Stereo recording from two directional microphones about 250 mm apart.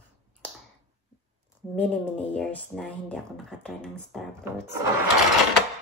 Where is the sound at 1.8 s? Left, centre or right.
Centre.